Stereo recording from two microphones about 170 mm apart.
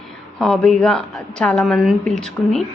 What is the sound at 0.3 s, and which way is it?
A woman's voice, centre (ahead or behind).